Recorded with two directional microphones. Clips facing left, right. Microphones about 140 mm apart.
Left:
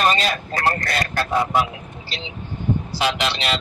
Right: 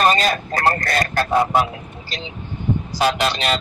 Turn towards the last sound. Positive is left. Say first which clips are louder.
# right 3 dB
turn(degrees=-45)  # may be behind; listen again after turning